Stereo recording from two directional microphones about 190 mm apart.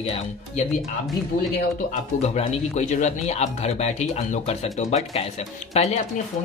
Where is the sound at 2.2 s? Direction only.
35° left (ahead or behind).